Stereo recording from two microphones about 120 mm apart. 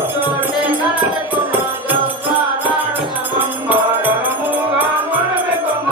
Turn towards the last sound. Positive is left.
turn(degrees=-15)  # may be behind; listen again after turning